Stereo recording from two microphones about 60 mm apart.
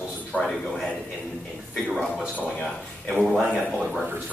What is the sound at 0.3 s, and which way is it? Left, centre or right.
Speech, centre.